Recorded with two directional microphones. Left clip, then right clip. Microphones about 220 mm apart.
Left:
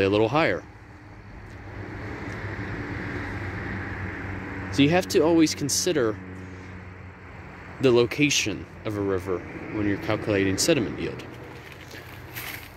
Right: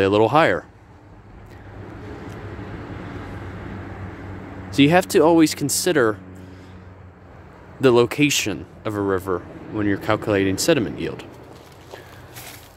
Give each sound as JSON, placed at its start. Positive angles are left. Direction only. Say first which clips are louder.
{"t": 0.0, "sound": "speech", "louder": "right 6 dB", "side_deg": -20}
{"t": 4.6, "sound": "speech", "louder": "right 6 dB", "side_deg": -30}
{"t": 7.8, "sound": "speech", "louder": "right 4 dB", "side_deg": -25}